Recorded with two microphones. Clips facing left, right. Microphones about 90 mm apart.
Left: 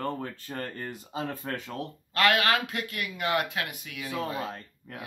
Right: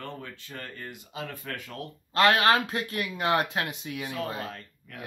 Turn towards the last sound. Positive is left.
turn(degrees=30)  # may be behind; listen again after turning